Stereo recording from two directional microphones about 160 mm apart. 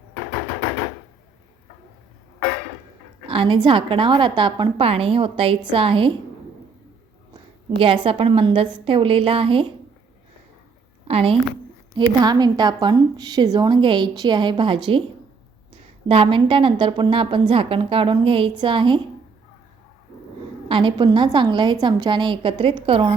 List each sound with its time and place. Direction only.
3.2 s a woman's voice: 30° right (ahead or behind)
7.8 s a woman's voice: 35° right (ahead or behind)
11.1 s a woman's voice: 35° right (ahead or behind)
11.9 s a woman's voice: 25° right (ahead or behind)
20.7 s a woman's voice: 30° right (ahead or behind)